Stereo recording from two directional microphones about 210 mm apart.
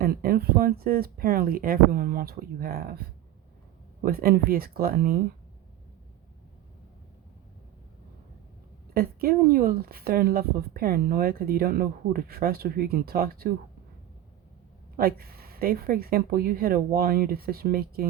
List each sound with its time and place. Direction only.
0.0 s speech: 45° right (ahead or behind)
4.0 s speech: 45° right (ahead or behind)
8.9 s speech: 45° right (ahead or behind)
14.9 s speech: 45° right (ahead or behind)